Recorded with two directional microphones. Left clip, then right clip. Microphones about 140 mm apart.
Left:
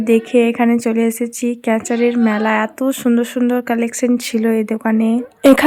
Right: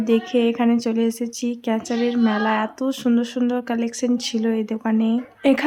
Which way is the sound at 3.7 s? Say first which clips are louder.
Left 6 dB; 35° left (ahead or behind).